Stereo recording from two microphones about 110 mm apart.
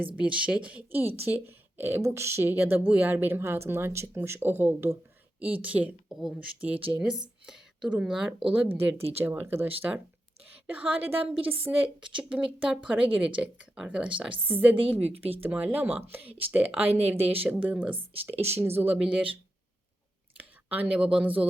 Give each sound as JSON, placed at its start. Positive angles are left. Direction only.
{"t": 0.2, "sound": "a woman's voice", "side_deg": -10}
{"t": 7.4, "sound": "a sound", "side_deg": -5}
{"t": 8.0, "sound": "a woman's voice", "side_deg": -5}
{"t": 9.2, "sound": "a woman's voice", "side_deg": -20}
{"t": 15.1, "sound": "speech", "side_deg": -65}
{"t": 15.4, "sound": "a woman's voice", "side_deg": -15}
{"t": 18.3, "sound": "speech", "side_deg": -75}
{"t": 18.6, "sound": "a woman's voice", "side_deg": -20}